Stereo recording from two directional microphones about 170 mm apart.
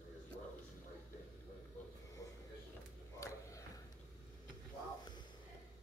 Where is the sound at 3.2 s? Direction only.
20° left (ahead or behind).